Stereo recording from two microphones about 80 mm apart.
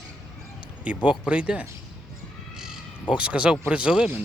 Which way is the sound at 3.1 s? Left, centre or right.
Centre.